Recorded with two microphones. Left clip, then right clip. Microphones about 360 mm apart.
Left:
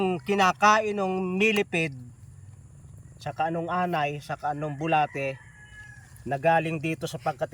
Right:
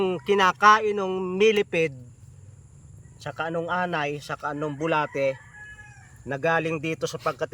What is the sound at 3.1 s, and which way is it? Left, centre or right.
Speech, centre.